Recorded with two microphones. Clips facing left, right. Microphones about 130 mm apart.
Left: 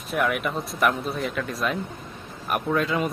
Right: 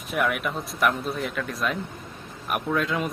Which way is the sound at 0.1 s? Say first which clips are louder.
Left 1 dB; centre (ahead or behind).